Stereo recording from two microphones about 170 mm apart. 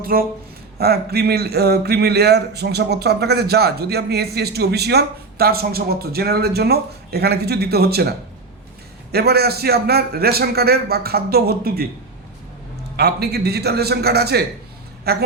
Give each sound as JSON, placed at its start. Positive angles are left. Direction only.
{"t": 0.0, "sound": "a man's voice", "side_deg": -60}
{"t": 9.1, "sound": "a man's voice", "side_deg": -70}
{"t": 13.0, "sound": "a man's voice", "side_deg": -70}